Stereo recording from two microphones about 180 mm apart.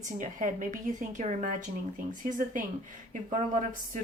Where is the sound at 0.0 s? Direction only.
45° right (ahead or behind).